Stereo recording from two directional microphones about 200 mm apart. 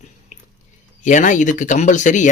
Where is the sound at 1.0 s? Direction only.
40° left (ahead or behind).